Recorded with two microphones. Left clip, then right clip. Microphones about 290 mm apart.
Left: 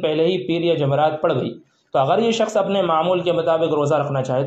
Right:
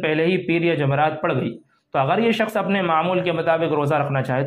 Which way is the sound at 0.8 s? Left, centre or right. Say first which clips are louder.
Left 2 dB; right.